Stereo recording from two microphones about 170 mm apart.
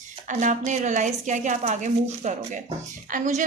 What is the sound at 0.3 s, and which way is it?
A woman's voice, 45° right (ahead or behind).